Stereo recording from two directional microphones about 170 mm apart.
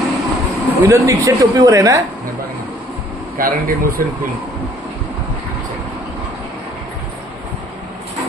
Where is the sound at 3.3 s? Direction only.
55° right (ahead or behind).